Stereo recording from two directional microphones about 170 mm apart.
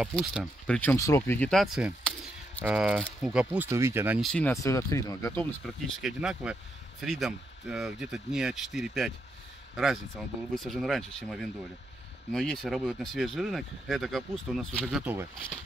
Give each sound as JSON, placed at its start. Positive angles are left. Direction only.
{"t": 0.1, "sound": "speech", "side_deg": 0}
{"t": 0.7, "sound": "speech", "side_deg": 15}
{"t": 4.2, "sound": "speech", "side_deg": 5}
{"t": 5.4, "sound": "speech", "side_deg": 0}